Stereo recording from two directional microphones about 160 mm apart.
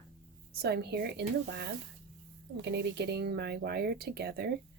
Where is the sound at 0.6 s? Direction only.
85° right.